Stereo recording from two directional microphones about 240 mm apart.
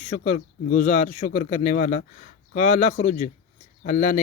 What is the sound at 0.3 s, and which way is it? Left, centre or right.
Speech, left.